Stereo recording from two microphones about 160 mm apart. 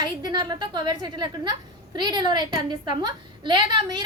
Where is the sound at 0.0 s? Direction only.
25° right (ahead or behind).